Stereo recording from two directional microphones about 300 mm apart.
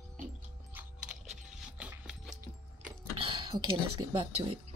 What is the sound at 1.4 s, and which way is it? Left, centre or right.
Music, centre.